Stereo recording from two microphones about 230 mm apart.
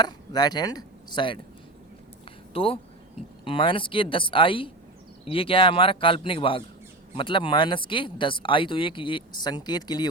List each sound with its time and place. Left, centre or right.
0.0 s speech: centre
2.5 s speech: left